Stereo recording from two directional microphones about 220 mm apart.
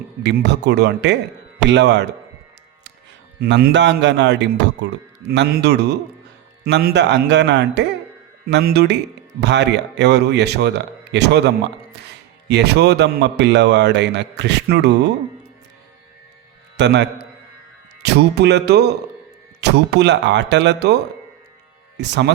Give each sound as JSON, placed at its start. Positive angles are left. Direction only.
{"t": 0.2, "sound": "a man's voice", "side_deg": -50}
{"t": 3.4, "sound": "a man's voice", "side_deg": -50}
{"t": 16.7, "sound": "a man's voice", "side_deg": -50}